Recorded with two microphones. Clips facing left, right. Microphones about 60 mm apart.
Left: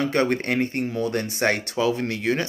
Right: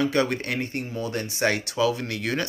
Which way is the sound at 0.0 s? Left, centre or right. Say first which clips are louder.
Left 1 dB; left.